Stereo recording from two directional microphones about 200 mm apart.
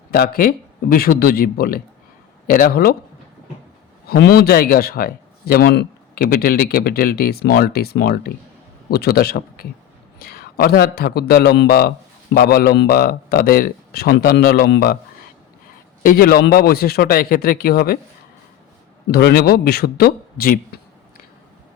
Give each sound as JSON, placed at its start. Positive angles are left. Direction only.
{"t": 0.1, "sound": "a man's voice", "side_deg": 50}
{"t": 4.1, "sound": "a man's voice", "side_deg": 50}
{"t": 16.0, "sound": "a man's voice", "side_deg": 50}
{"t": 19.1, "sound": "a man's voice", "side_deg": 50}